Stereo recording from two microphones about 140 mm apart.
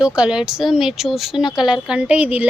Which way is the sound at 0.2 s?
5° right (ahead or behind).